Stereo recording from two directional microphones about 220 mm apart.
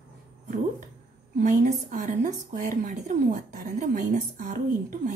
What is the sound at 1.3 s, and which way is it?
A woman's voice, 35° right (ahead or behind).